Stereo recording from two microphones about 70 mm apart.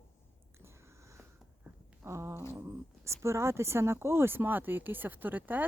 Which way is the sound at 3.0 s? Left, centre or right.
Right.